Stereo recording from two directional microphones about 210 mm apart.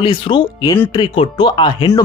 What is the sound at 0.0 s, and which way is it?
Speech, 25° left (ahead or behind).